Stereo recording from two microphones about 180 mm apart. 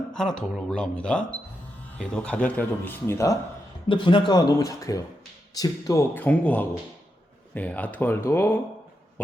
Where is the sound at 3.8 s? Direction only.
25° left (ahead or behind).